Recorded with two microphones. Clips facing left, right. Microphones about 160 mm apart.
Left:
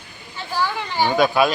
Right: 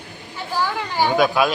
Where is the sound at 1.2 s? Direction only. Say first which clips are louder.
Left 1 dB; centre (ahead or behind).